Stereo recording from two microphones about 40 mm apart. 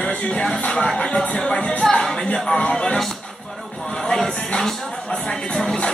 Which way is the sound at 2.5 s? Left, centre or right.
Left.